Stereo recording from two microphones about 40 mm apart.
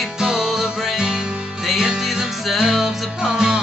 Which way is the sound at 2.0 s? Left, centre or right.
Centre.